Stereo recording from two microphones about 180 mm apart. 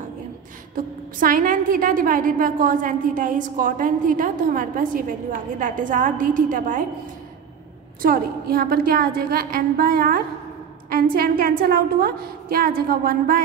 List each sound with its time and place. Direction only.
0.7 s a woman's voice: 50° right (ahead or behind)
8.0 s a woman's voice: 55° right (ahead or behind)